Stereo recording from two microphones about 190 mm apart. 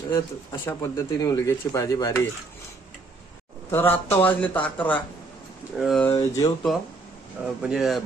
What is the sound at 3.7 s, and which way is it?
A man's voice, 10° left (ahead or behind).